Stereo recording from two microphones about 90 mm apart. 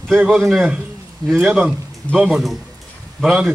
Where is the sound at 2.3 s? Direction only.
Centre (ahead or behind).